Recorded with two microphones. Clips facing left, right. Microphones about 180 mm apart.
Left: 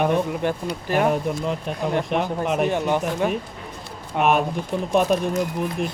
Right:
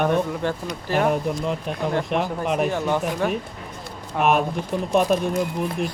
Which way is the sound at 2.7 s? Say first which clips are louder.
Left 1 dB; 20° left (ahead or behind).